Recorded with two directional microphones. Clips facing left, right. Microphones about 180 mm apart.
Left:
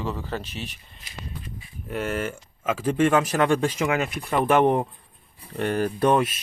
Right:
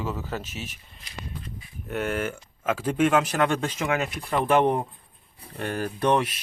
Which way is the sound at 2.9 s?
10° right (ahead or behind).